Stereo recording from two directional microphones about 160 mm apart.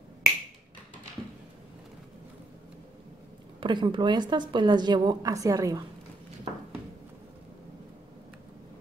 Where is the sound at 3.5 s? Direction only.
30° right (ahead or behind).